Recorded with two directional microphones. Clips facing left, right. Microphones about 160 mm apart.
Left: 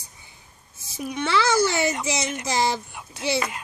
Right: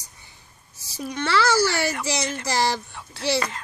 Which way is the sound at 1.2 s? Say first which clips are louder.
Even; 20° left (ahead or behind).